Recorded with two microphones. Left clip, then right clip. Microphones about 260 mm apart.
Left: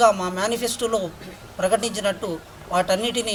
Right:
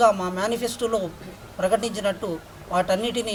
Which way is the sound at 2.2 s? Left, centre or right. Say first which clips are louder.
Left 1 dB; right.